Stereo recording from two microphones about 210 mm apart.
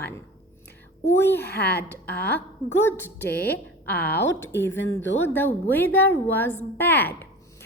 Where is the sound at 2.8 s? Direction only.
10° left (ahead or behind).